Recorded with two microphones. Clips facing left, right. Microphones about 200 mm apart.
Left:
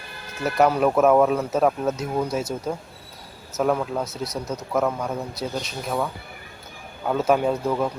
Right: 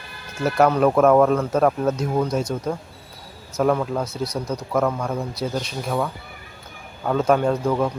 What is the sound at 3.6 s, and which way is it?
Speech, centre (ahead or behind).